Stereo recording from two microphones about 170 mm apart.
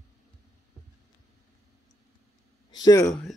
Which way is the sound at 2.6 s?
25° left (ahead or behind).